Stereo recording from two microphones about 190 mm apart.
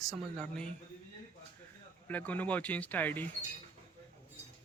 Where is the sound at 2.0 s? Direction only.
10° left (ahead or behind).